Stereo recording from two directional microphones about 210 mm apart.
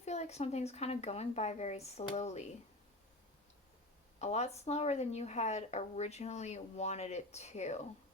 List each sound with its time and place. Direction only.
0.0 s a woman's voice: 30° left (ahead or behind)
4.2 s a woman's voice: 30° left (ahead or behind)